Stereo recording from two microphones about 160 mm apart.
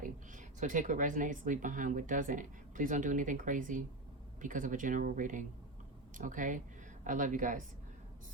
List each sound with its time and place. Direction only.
0.0 s speech: 55° right (ahead or behind)